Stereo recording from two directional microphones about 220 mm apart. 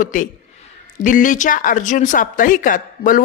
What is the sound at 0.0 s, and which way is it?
A woman's voice, 35° left (ahead or behind).